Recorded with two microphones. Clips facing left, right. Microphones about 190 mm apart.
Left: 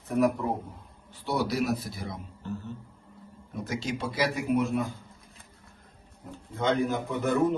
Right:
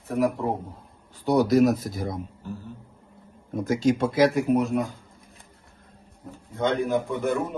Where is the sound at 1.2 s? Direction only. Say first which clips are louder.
Right 9 dB; 40° right (ahead or behind).